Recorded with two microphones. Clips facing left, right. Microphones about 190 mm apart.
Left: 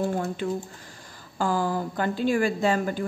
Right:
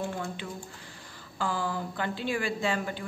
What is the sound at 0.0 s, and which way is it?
A woman's voice, 45° left (ahead or behind).